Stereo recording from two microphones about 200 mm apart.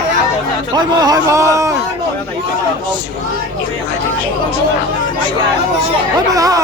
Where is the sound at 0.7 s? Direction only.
20° right (ahead or behind).